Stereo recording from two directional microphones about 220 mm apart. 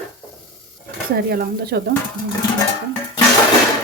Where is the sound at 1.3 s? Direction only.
45° right (ahead or behind).